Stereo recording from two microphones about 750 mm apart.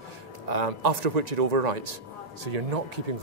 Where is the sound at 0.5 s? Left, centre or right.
Right.